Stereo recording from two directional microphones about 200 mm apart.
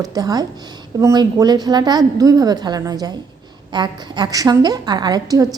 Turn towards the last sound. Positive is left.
turn(degrees=-20)  # may be behind; listen again after turning